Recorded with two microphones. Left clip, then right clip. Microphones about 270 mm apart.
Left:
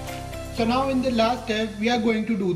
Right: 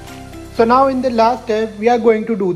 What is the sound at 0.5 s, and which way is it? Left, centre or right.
Speech, centre.